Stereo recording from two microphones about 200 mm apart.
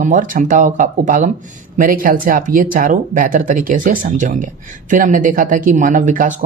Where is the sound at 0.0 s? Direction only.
40° right (ahead or behind).